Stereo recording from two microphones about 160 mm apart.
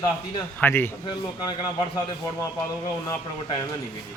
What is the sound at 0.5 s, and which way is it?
Speech, 15° left (ahead or behind).